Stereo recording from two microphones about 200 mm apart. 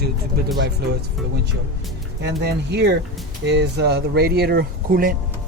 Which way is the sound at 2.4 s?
55° right (ahead or behind).